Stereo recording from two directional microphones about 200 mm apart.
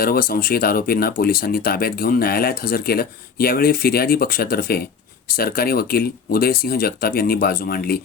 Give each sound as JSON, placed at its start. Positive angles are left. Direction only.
{"t": 0.0, "sound": "speech", "side_deg": 45}